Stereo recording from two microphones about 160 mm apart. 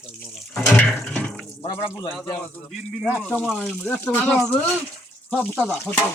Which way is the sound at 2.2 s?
15° left (ahead or behind).